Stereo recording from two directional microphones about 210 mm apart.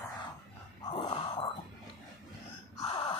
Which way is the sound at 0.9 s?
25° left (ahead or behind).